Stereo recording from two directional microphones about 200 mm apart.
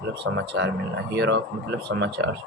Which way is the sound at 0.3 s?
65° right (ahead or behind).